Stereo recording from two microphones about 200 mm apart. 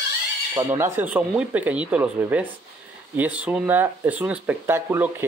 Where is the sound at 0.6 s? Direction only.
15° right (ahead or behind).